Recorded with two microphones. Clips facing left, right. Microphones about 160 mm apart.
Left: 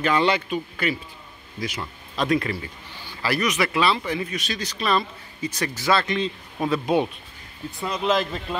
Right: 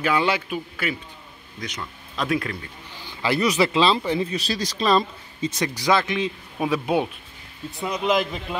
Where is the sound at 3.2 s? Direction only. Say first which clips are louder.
Right 3 dB; 20° right (ahead or behind).